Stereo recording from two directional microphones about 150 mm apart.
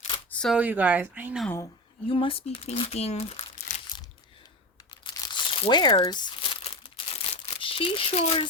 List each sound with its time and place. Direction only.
0.3 s camera: 5° left (ahead or behind)
0.5 s speech: 10° right (ahead or behind)
2.0 s speech: 35° left (ahead or behind)
5.0 s crumpling: 30° left (ahead or behind)
7.4 s speech: 40° left (ahead or behind)